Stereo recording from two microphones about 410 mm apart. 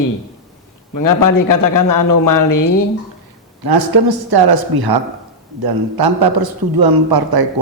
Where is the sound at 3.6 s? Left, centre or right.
Right.